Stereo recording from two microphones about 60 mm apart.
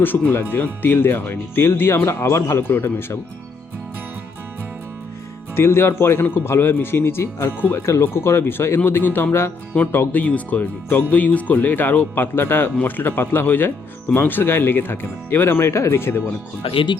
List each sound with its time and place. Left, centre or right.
0.0 s speech: left
2.0 s speech: left
2.6 s speech: left
5.5 s speech: left